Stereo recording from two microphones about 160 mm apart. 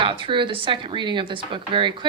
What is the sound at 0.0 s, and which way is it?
Speech, 30° right (ahead or behind).